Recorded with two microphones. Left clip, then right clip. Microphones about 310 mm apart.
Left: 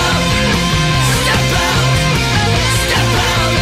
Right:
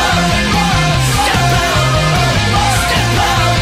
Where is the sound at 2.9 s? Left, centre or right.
Centre.